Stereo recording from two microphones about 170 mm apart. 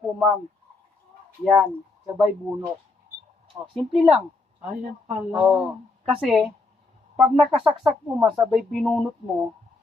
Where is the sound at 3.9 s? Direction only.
5° right (ahead or behind).